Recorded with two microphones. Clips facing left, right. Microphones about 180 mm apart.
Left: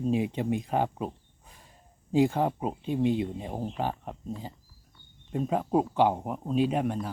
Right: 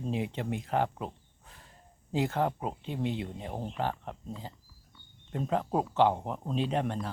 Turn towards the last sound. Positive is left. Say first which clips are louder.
# left 4 dB
turn(degrees=10)  # may be behind; listen again after turning